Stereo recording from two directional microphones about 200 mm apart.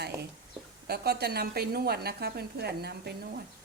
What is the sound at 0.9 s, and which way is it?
A woman's voice, 50° right (ahead or behind).